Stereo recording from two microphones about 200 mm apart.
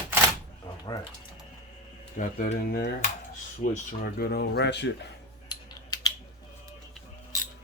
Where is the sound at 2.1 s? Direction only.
40° left (ahead or behind); by 4.9 s 60° left (ahead or behind).